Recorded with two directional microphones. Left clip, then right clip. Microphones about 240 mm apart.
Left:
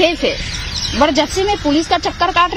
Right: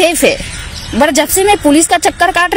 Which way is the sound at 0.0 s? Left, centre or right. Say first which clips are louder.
Right 5 dB; right.